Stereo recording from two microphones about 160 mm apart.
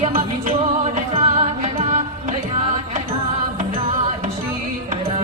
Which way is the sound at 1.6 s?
50° right (ahead or behind).